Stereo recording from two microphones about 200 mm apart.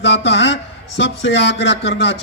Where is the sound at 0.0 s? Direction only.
60° left (ahead or behind).